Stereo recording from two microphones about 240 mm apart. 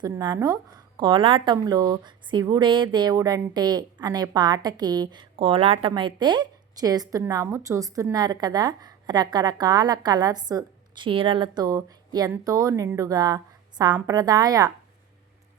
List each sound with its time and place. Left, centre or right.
0.0 s a woman's voice: centre